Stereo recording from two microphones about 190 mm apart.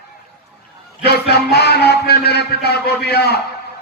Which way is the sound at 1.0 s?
55° left (ahead or behind).